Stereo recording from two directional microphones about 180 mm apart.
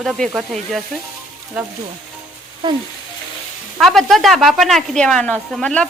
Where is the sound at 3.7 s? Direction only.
Centre (ahead or behind).